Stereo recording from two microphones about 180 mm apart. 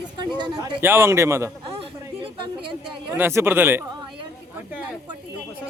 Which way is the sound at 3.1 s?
15° right (ahead or behind).